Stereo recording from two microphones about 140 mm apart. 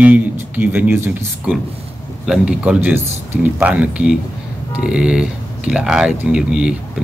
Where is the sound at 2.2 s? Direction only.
5° right (ahead or behind).